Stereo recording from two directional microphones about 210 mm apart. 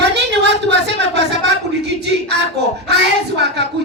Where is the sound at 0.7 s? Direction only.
55° right (ahead or behind).